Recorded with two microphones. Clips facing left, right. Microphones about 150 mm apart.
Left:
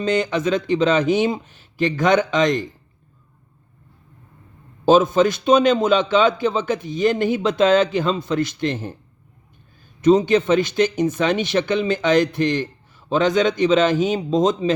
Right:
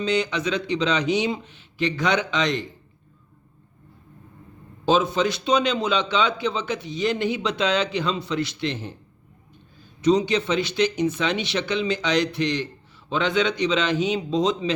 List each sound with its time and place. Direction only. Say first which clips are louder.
0.0 s a man's voice: left 4 dB; 50° left (ahead or behind)
4.9 s a man's voice: left 6 dB; 45° left (ahead or behind)
10.0 s a man's voice: left 5 dB; 50° left (ahead or behind)